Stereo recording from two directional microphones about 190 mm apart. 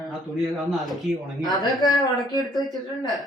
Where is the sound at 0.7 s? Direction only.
Centre (ahead or behind).